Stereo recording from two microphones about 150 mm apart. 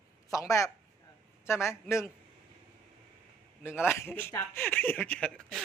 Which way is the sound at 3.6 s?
15° left (ahead or behind).